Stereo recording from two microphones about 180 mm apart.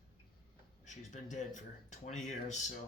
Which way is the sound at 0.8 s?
40° left (ahead or behind).